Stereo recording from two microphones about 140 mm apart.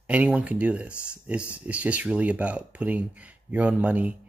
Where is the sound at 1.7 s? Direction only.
10° right (ahead or behind).